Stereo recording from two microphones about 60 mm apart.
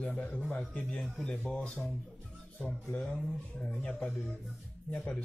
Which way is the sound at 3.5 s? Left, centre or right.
Centre.